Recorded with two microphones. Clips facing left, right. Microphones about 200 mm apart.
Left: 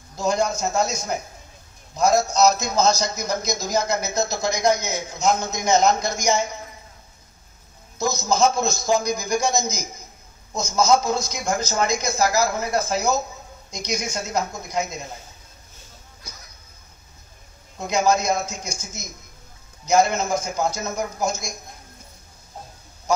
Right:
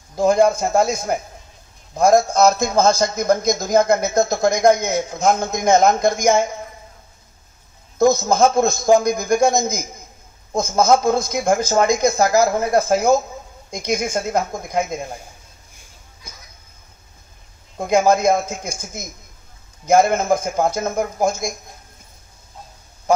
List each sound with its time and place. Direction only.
0.1 s a man's voice: 55° right (ahead or behind)
8.0 s a man's voice: 55° right (ahead or behind)
17.7 s a man's voice: 55° right (ahead or behind)